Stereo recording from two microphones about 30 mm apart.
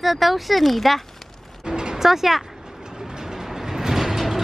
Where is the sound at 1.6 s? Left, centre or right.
Right.